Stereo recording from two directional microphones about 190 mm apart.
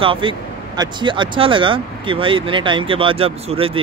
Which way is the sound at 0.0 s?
25° right (ahead or behind).